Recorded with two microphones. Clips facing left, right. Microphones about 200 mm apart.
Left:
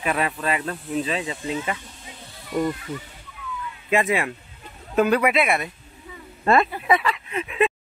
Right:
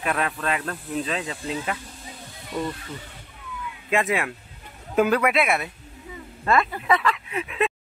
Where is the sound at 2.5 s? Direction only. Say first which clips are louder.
Left 5 dB; 20° left (ahead or behind).